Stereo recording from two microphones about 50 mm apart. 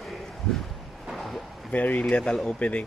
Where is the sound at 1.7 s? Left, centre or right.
Left.